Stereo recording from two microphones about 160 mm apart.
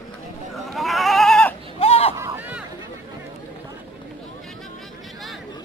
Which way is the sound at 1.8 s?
40° left (ahead or behind).